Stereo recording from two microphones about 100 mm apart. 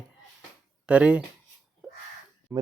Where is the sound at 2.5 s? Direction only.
25° right (ahead or behind).